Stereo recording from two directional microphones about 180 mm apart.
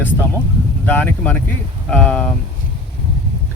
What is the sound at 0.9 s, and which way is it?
Speech, 10° left (ahead or behind).